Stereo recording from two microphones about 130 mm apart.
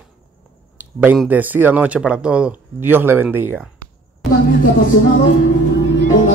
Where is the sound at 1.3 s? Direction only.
15° right (ahead or behind).